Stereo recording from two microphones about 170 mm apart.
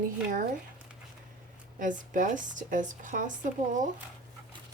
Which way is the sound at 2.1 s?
50° right (ahead or behind).